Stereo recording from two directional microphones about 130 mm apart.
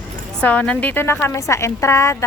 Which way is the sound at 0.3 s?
10° left (ahead or behind).